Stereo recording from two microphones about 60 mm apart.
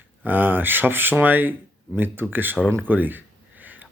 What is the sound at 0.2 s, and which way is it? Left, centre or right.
Speech, right.